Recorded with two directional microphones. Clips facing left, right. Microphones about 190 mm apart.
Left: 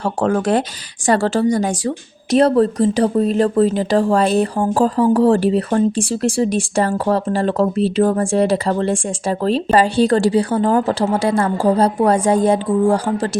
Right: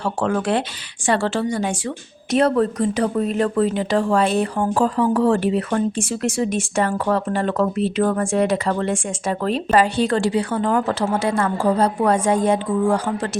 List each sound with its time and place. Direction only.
0.0 s a woman's voice: 40° left (ahead or behind)